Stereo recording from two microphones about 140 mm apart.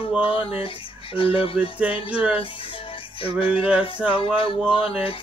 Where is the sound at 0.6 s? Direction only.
40° left (ahead or behind).